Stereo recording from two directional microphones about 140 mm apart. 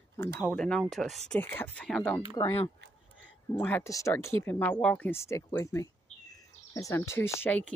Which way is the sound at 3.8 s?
20° left (ahead or behind).